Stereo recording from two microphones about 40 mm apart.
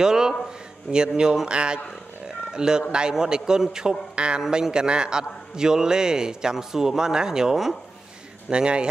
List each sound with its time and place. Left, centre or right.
0.0 s a man's voice: centre
2.2 s roaring cats: centre
2.9 s a man's voice: centre
8.5 s speech: right